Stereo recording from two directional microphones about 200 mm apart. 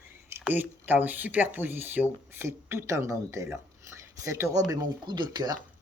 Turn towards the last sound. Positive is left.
turn(degrees=-20)  # may be behind; listen again after turning